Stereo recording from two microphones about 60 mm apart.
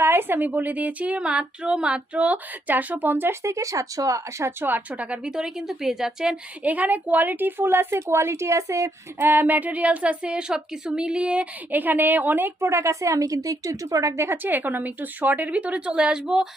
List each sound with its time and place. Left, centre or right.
0.0 s a woman's voice: right
3.4 s a woman's voice: right
4.6 s a woman's voice: right; by 6.3 s centre
6.6 s a woman's voice: right
9.1 s a woman's voice: right; by 11.4 s centre
11.7 s a woman's voice: right
12.6 s a woman's voice: right
14.3 s a woman's voice: right; by 16.5 s centre